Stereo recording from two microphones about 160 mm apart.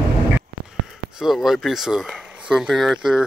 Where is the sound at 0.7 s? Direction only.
Centre (ahead or behind).